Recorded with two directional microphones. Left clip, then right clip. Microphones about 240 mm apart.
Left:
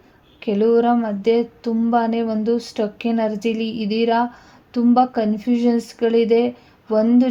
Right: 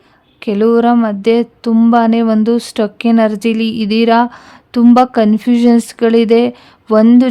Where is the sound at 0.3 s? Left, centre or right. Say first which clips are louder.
Right 5 dB; right.